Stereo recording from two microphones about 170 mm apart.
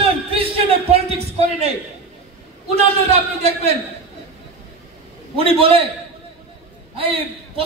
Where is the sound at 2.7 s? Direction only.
40° right (ahead or behind).